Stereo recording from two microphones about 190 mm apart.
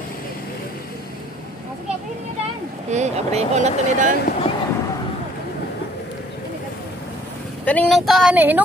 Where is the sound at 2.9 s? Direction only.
35° right (ahead or behind).